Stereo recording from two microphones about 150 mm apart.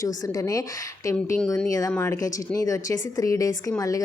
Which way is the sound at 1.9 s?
20° left (ahead or behind).